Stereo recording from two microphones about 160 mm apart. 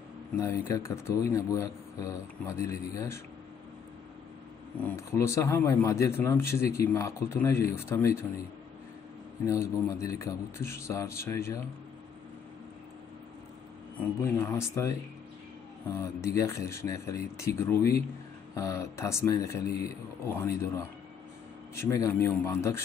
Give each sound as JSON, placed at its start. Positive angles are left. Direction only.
{"t": 0.4, "sound": "speech", "side_deg": 20}
{"t": 4.8, "sound": "speech", "side_deg": 15}
{"t": 9.5, "sound": "speech", "side_deg": 20}
{"t": 14.2, "sound": "speech", "side_deg": 15}